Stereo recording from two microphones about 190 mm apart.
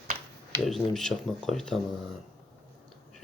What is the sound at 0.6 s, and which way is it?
Speech, centre (ahead or behind).